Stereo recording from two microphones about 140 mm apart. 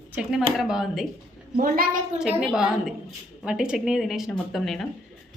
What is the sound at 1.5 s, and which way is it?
Speech, 90° right.